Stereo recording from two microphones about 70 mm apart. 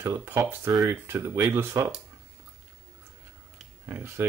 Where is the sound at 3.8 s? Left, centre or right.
Right.